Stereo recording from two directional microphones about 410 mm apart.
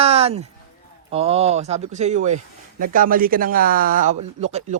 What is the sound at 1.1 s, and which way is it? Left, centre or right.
Speech, centre.